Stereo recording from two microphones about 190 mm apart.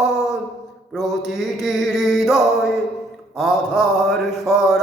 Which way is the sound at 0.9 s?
Centre (ahead or behind).